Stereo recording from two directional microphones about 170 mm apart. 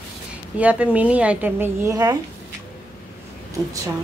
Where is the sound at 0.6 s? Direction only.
10° right (ahead or behind).